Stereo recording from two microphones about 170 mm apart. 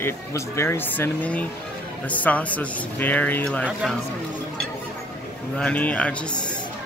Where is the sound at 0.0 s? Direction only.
15° left (ahead or behind).